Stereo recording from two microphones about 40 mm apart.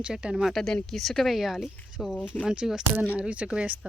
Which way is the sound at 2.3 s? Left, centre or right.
Left.